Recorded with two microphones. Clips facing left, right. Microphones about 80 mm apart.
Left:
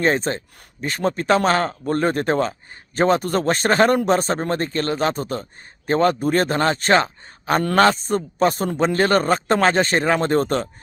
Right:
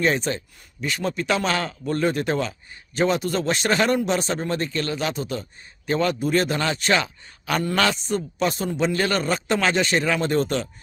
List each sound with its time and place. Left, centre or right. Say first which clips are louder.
0.0 s speech: left 3 dB; left